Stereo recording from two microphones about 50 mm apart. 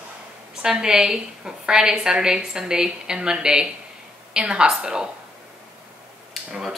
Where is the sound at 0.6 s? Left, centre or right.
Centre.